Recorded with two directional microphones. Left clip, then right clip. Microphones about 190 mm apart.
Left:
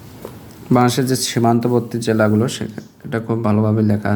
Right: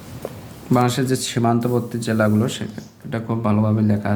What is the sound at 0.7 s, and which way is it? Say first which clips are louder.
Speech: left 3 dB; 25° left (ahead or behind).